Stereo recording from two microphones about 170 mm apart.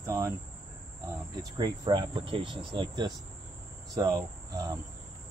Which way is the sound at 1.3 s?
25° right (ahead or behind).